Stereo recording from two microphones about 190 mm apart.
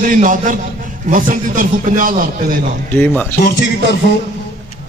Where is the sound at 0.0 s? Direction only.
45° right (ahead or behind).